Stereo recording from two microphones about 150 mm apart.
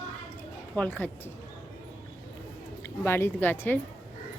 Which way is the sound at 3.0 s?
15° left (ahead or behind).